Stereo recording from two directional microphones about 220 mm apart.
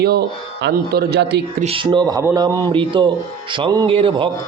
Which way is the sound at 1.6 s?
25° right (ahead or behind).